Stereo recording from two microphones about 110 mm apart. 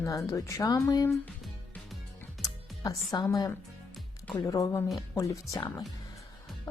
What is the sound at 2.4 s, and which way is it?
Music, 35° left (ahead or behind).